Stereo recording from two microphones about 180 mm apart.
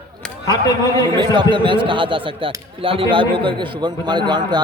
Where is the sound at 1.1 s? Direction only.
25° right (ahead or behind).